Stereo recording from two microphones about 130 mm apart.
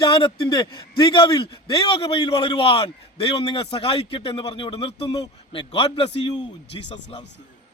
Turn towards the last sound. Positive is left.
turn(degrees=50)  # may be behind; listen again after turning